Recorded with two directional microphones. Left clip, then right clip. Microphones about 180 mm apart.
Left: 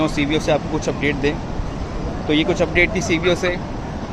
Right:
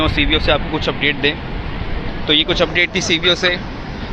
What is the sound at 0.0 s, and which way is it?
Speech, 15° left (ahead or behind).